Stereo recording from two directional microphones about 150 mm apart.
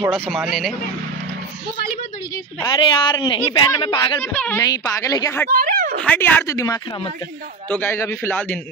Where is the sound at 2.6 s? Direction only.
30° left (ahead or behind).